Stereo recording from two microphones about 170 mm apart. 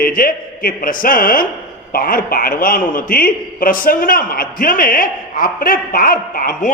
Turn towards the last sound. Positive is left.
turn(degrees=55)  # may be behind; listen again after turning